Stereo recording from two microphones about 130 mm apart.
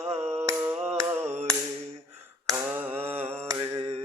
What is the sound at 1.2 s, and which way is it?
A capella, 55° right (ahead or behind).